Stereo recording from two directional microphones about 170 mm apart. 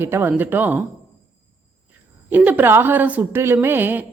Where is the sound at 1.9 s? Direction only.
10° right (ahead or behind).